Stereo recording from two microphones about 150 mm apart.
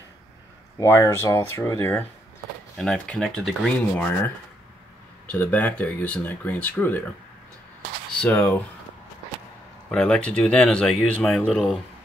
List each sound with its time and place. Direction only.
0.7 s speech: 20° left (ahead or behind)
2.8 s speech: 5° left (ahead or behind)
8.2 s speech: 10° left (ahead or behind)
9.8 s speech: 5° left (ahead or behind)